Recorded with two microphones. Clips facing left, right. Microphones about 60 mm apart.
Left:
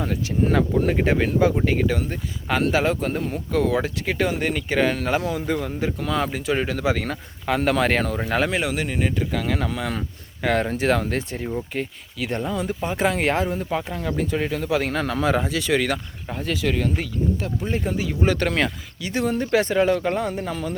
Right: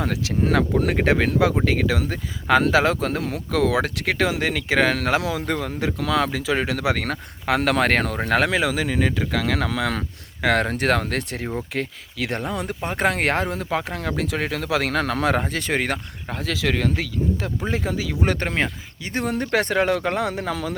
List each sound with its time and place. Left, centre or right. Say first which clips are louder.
0.0 s speech: even; right
1.6 s speech: even; right
9.0 s speech: right 1 dB; right
10.4 s speech: right 1 dB; right
11.7 s speech: right 1 dB; right
15.4 s speech: left 2 dB; right
16.3 s speech: even; right
18.3 s speech: left 2 dB; right
19.0 s speech: left 1 dB; right